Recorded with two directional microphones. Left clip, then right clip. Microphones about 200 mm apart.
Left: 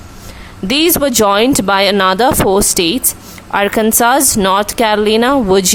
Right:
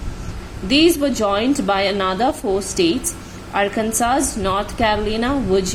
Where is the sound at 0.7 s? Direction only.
35° left (ahead or behind).